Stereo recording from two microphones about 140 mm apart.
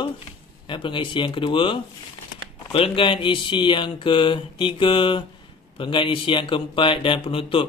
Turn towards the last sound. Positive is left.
turn(degrees=40)  # may be behind; listen again after turning